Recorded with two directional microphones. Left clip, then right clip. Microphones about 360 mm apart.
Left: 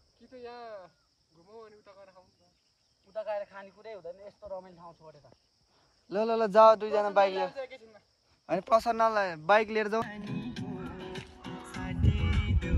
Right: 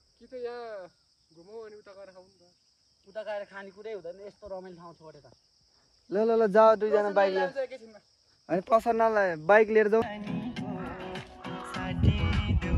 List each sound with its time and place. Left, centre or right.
0.2 s a man's voice: centre
11.7 s music: centre